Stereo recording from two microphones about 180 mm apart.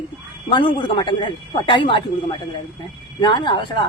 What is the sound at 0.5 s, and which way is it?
Speech, 25° left (ahead or behind).